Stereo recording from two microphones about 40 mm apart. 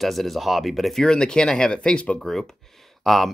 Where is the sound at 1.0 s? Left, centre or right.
Centre.